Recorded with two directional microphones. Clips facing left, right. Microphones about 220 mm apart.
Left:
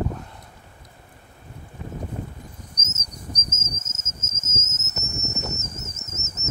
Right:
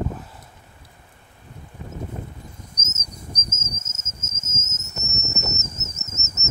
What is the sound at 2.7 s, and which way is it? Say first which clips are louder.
Insect: even; 10° right (ahead or behind).